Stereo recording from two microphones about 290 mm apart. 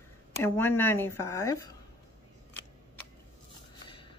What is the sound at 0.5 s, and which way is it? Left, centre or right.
Speech, centre.